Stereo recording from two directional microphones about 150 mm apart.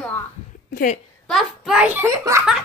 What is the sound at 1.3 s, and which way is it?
A child's voice, centre (ahead or behind).